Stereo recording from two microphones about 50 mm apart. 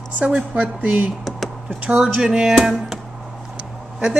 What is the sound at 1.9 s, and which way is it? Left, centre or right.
Speech, centre.